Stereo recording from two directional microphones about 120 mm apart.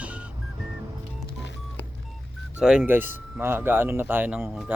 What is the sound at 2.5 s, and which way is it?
Speech, 10° right (ahead or behind).